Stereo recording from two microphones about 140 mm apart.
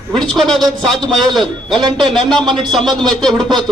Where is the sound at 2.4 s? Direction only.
35° right (ahead or behind).